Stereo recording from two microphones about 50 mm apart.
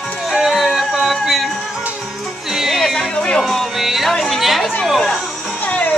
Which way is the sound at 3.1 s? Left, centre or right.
Centre.